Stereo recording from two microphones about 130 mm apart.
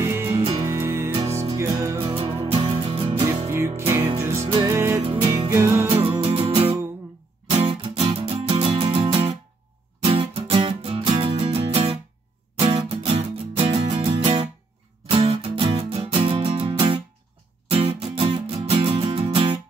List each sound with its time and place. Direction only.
0.0 s music: 20° right (ahead or behind)
2.1 s music: 45° right (ahead or behind)
3.3 s music: 20° right (ahead or behind)
6.2 s music: 45° right (ahead or behind)